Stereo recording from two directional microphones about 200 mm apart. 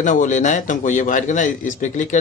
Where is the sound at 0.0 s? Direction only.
40° left (ahead or behind).